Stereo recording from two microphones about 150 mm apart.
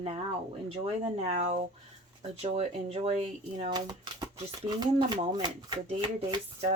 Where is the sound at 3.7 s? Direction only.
25° right (ahead or behind).